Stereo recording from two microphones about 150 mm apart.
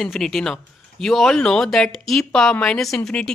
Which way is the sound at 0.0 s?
Centre (ahead or behind).